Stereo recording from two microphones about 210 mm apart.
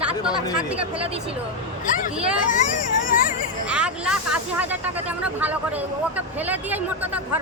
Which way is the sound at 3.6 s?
5° right (ahead or behind).